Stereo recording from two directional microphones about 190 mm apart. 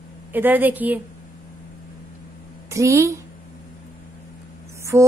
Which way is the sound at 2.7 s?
15° right (ahead or behind).